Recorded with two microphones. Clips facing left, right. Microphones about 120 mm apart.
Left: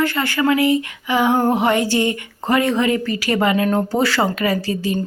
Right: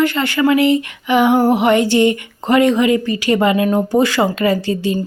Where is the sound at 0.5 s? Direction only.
25° right (ahead or behind).